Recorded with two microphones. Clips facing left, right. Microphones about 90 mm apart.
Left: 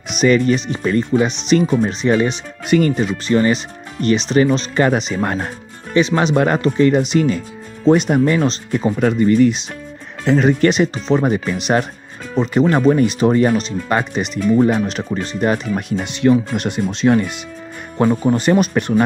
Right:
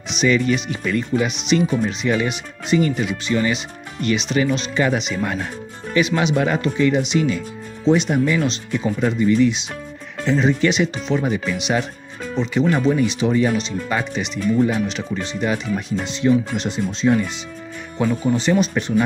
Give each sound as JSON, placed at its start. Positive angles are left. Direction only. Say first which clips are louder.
{"t": 0.2, "sound": "speech", "louder": "left 4 dB", "side_deg": 40}
{"t": 10.2, "sound": "speech", "louder": "left 4 dB", "side_deg": 55}
{"t": 17.9, "sound": "speech", "louder": "left 4 dB", "side_deg": 45}